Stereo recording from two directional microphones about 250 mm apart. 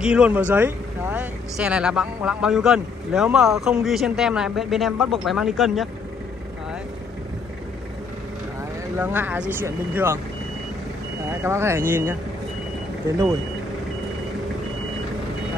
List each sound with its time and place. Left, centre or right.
0.0 s speech: centre
8.9 s speech: centre
11.4 s speech: centre